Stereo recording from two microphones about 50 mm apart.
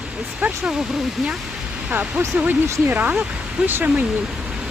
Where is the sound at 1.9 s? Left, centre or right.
Right.